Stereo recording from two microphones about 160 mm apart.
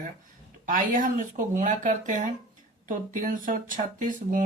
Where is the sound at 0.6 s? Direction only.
55° right (ahead or behind).